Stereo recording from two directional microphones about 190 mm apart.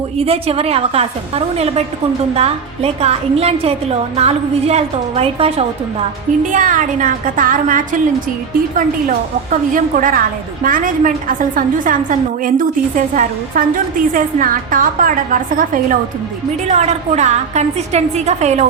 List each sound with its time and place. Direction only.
0.2 s a woman's voice: 30° right (ahead or behind)
6.5 s a woman's voice: 45° right (ahead or behind)
9.7 s a woman's voice: 45° right (ahead or behind)